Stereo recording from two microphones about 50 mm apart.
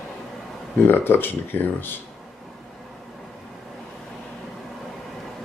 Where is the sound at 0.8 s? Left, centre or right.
Left.